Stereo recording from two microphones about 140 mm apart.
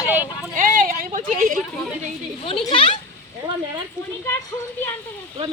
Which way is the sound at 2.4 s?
40° left (ahead or behind).